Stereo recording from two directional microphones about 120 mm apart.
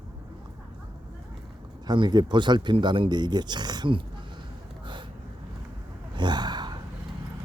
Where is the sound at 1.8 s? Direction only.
40° right (ahead or behind).